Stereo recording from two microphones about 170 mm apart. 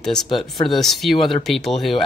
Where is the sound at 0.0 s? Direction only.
5° left (ahead or behind).